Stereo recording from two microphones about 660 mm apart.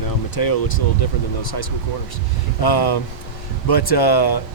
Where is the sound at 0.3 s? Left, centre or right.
Left.